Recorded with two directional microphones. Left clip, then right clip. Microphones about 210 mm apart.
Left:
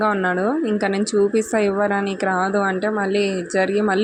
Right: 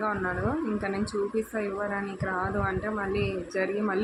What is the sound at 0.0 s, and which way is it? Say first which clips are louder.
Speech: left 10 dB; 35° left (ahead or behind).